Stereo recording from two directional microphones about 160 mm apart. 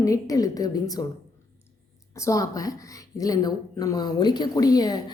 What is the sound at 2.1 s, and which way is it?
Speech, 20° left (ahead or behind).